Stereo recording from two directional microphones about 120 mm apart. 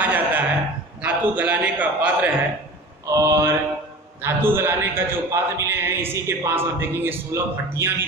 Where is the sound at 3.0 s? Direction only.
25° right (ahead or behind).